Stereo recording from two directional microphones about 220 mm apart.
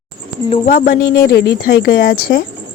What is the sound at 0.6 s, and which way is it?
A woman's voice, 40° left (ahead or behind).